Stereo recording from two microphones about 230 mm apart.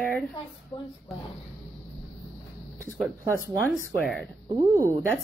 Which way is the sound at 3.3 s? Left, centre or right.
Centre.